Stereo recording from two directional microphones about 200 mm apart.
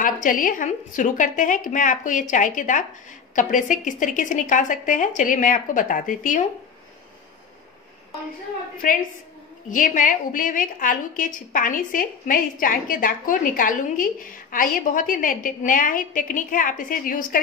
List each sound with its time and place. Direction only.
0.0 s speech: 45° left (ahead or behind)
8.8 s a woman's voice: 40° left (ahead or behind)